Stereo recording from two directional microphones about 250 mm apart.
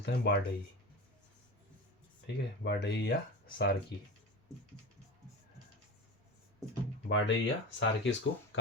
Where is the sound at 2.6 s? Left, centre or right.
Left.